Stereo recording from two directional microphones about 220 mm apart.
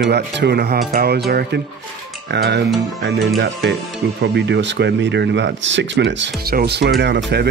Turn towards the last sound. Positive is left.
turn(degrees=-50)  # may be behind; listen again after turning